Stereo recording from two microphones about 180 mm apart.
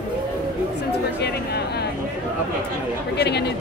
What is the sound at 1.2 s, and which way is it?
Speech, 65° left (ahead or behind).